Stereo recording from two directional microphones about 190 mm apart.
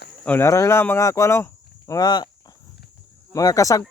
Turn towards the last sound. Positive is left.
turn(degrees=15)  # may be behind; listen again after turning